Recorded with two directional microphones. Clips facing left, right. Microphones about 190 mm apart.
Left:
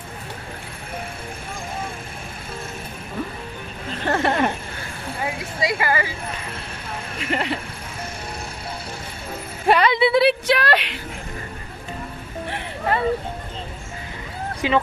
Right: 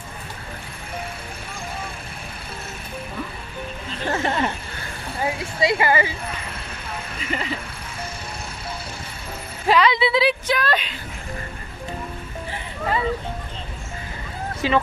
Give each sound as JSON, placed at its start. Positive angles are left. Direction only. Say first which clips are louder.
{"t": 4.1, "sound": "a sound", "louder": "left 3 dB", "side_deg": 55}
{"t": 5.2, "sound": "a sound", "louder": "right 3 dB", "side_deg": -25}
{"t": 7.2, "sound": "speech", "louder": "left 4 dB", "side_deg": 70}
{"t": 9.7, "sound": "speech", "louder": "left 1 dB", "side_deg": 55}
{"t": 12.4, "sound": "music", "louder": "left 2 dB", "side_deg": 65}
{"t": 14.6, "sound": "speech", "louder": "even", "side_deg": 15}